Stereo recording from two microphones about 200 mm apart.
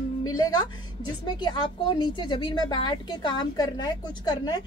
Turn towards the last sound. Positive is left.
turn(degrees=20)  # may be behind; listen again after turning